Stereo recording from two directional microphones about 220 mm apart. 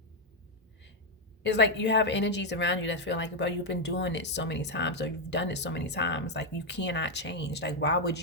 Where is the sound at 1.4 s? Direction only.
55° left (ahead or behind).